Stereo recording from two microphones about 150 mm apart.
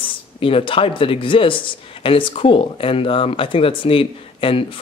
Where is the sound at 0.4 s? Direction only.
40° left (ahead or behind).